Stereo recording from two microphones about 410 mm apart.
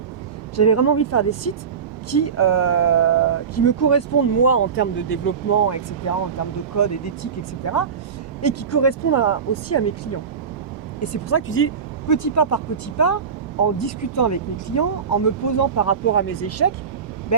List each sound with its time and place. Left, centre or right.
0.5 s speech: left
11.3 s speech: left
12.0 s speech: left